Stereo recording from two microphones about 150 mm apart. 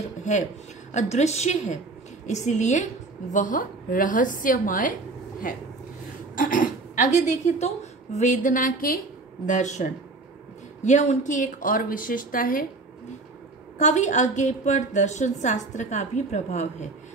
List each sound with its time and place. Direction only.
0.2 s a woman's voice: 55° left (ahead or behind)
6.3 s a woman's voice: 65° left (ahead or behind)
9.5 s a woman's voice: 55° left (ahead or behind)
13.7 s a woman's voice: 50° left (ahead or behind)